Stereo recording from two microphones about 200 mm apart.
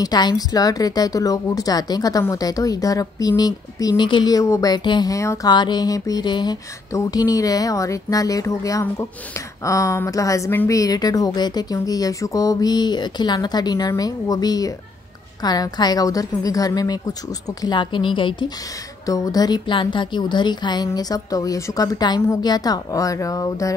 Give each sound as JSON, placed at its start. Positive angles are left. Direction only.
{"t": 0.0, "sound": "a woman's voice", "side_deg": 20}